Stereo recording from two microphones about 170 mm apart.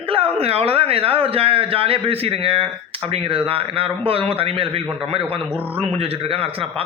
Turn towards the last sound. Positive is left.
turn(degrees=-35)  # may be behind; listen again after turning